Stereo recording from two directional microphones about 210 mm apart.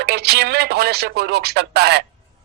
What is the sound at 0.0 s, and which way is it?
A man's voice, 50° right (ahead or behind).